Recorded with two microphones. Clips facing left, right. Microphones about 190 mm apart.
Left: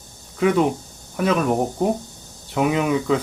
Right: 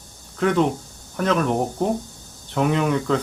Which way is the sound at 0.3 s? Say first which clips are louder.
Left 1 dB; 10° left (ahead or behind).